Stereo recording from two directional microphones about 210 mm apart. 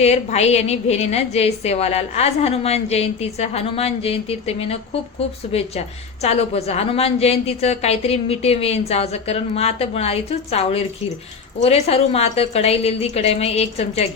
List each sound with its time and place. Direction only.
0.0 s a woman's voice: 30° left (ahead or behind)